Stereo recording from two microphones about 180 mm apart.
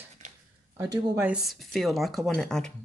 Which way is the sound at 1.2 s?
5° right (ahead or behind).